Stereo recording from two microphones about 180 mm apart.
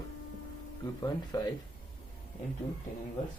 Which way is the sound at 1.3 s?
25° left (ahead or behind).